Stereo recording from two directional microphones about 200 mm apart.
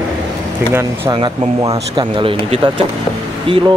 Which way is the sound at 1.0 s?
25° right (ahead or behind).